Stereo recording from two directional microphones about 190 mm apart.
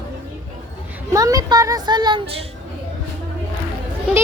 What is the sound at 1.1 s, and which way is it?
Speech, 20° right (ahead or behind).